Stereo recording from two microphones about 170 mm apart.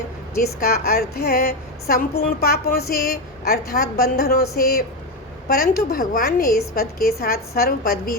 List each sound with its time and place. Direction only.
0.4 s a woman's voice: 65° left (ahead or behind)